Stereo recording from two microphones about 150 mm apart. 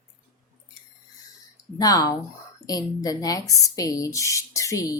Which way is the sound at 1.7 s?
25° left (ahead or behind).